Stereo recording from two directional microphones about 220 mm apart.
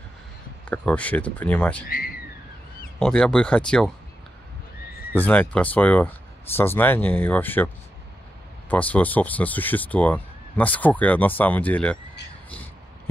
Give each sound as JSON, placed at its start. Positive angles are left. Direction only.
{"t": 0.7, "sound": "speech", "side_deg": 5}
{"t": 1.9, "sound": "speech", "side_deg": 40}
{"t": 3.0, "sound": "speech", "side_deg": 5}
{"t": 5.1, "sound": "speech", "side_deg": 5}